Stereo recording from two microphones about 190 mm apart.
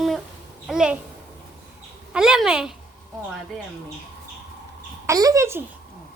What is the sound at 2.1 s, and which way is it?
Speech, 5° right (ahead or behind).